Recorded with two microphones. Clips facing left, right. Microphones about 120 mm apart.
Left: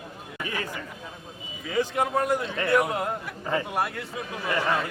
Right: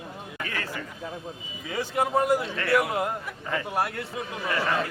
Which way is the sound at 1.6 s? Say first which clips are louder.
Left 2 dB; centre (ahead or behind).